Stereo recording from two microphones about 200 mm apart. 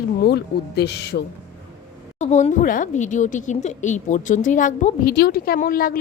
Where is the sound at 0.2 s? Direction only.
55° left (ahead or behind).